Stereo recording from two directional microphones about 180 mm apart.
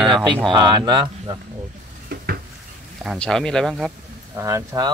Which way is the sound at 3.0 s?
Centre (ahead or behind).